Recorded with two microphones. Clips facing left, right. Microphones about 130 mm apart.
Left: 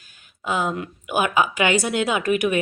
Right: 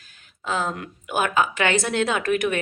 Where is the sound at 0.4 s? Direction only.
10° left (ahead or behind).